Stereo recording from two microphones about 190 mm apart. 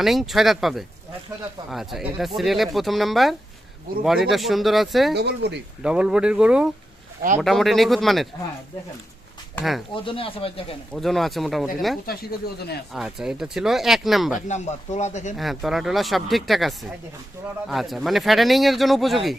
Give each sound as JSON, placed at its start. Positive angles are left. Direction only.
{"t": 0.0, "sound": "speech", "side_deg": 0}
{"t": 5.1, "sound": "speech", "side_deg": -60}
{"t": 5.8, "sound": "speech", "side_deg": -5}
{"t": 9.6, "sound": "speech", "side_deg": 0}
{"t": 9.9, "sound": "speech", "side_deg": 25}
{"t": 10.9, "sound": "speech", "side_deg": 0}
{"t": 12.1, "sound": "speech", "side_deg": 55}
{"t": 12.9, "sound": "speech", "side_deg": 0}
{"t": 14.3, "sound": "speech", "side_deg": 40}
{"t": 15.4, "sound": "speech", "side_deg": 0}